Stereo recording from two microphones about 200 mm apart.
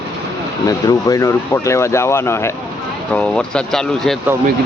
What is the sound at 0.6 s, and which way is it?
Speech, 15° left (ahead or behind).